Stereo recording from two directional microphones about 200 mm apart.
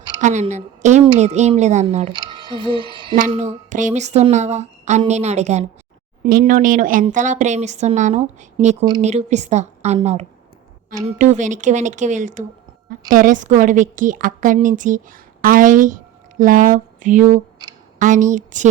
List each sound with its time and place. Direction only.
0.2 s a woman's voice: 35° right (ahead or behind)